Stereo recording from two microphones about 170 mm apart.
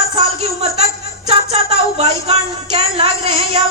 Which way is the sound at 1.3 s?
35° right (ahead or behind).